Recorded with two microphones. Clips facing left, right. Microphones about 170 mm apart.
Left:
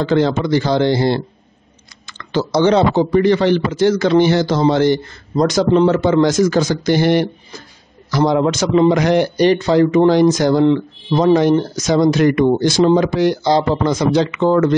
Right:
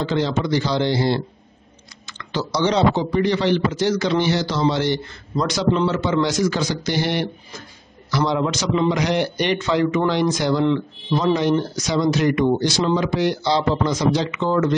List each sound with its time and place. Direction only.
0.0 s speech: 55° left (ahead or behind)